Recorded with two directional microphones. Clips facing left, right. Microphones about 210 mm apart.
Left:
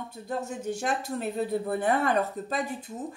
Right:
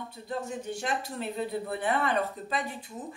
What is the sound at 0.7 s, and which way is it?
A woman's voice, 45° left (ahead or behind).